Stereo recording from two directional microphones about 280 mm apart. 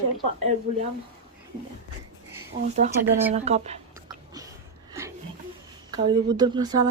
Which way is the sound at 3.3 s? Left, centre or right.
Right.